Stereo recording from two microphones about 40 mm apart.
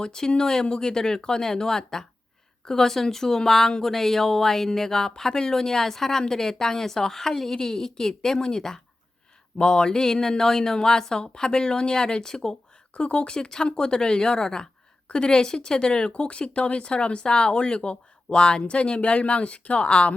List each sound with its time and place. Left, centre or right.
0.0 s speech: centre
12.9 s speech: left